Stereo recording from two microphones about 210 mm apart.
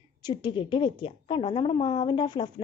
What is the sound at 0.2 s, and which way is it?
A woman's voice, 20° left (ahead or behind).